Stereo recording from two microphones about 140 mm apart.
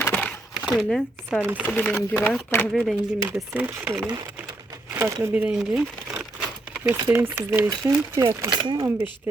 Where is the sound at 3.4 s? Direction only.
15° right (ahead or behind).